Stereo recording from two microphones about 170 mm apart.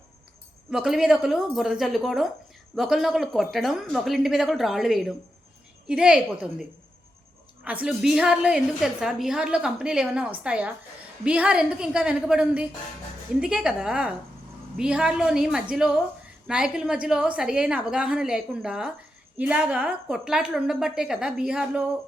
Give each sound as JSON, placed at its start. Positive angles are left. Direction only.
{"t": 0.7, "sound": "a woman's voice", "side_deg": -5}